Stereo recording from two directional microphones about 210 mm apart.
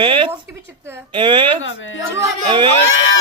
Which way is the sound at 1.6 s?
65° left (ahead or behind).